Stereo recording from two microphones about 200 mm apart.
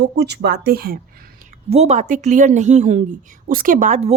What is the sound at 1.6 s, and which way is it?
A woman's voice, 30° right (ahead or behind).